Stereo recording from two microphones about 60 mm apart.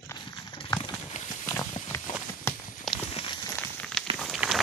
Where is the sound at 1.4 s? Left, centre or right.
Left.